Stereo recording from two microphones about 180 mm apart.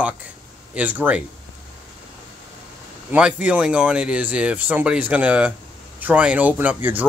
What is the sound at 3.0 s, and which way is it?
Speech, 5° right (ahead or behind).